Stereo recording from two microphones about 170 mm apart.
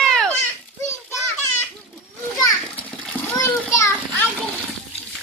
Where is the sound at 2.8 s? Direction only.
10° left (ahead or behind).